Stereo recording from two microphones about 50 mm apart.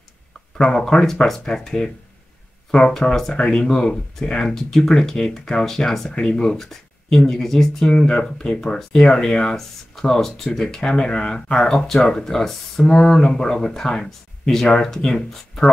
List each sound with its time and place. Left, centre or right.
0.6 s speech: centre
3.0 s speech: centre